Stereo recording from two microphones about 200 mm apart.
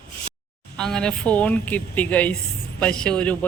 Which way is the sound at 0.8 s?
5° left (ahead or behind).